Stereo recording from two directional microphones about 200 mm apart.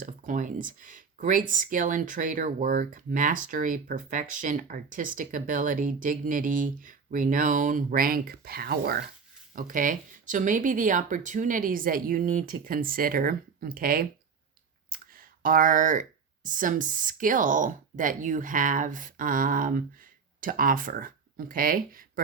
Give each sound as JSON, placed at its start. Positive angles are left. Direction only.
{"t": 0.0, "sound": "speech", "side_deg": -40}
{"t": 14.9, "sound": "clicking", "side_deg": -45}
{"t": 15.4, "sound": "speech", "side_deg": -40}